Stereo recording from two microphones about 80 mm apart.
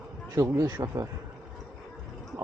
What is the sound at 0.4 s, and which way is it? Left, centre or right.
Speech, right.